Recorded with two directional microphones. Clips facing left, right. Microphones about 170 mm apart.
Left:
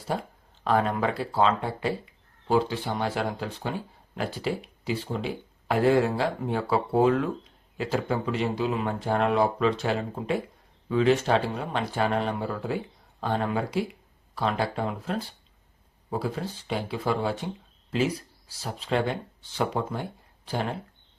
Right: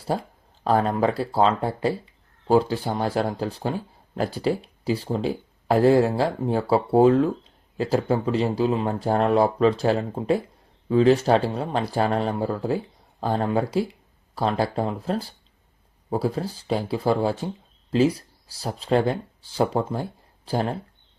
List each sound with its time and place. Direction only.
0.1 s speech: 35° right (ahead or behind)